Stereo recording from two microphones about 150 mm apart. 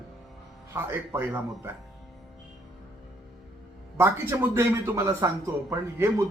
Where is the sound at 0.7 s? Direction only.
15° right (ahead or behind).